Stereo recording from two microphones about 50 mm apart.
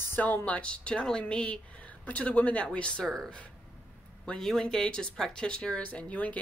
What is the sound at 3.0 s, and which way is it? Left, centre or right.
Speech, centre.